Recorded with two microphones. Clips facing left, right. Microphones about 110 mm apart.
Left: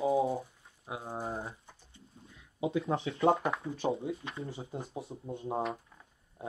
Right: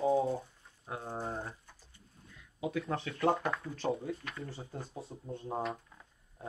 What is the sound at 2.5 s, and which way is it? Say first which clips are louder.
Speech: left 4 dB; 25° left (ahead or behind).